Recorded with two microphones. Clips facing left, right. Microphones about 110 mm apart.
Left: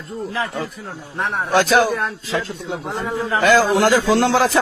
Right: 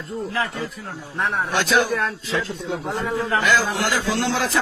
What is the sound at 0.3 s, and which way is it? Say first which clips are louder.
Speech: left 3 dB; 15° left (ahead or behind).